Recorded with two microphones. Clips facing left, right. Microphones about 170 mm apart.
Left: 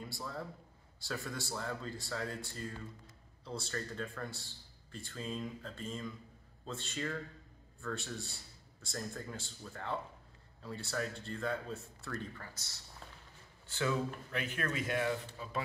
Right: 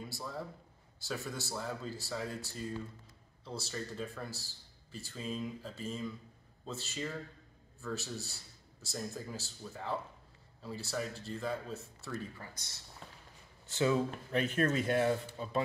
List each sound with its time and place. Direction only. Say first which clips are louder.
0.0 s a man's voice: right 1 dB; 5° right (ahead or behind)
13.7 s speech: right 4 dB; 25° right (ahead or behind)